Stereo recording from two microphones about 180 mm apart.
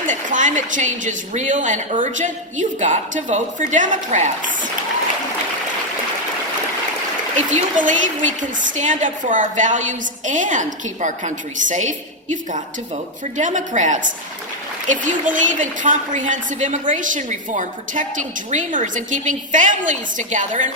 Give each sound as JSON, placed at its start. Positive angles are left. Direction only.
{"t": 0.1, "sound": "a woman's voice", "side_deg": -45}
{"t": 7.5, "sound": "a woman's voice", "side_deg": -45}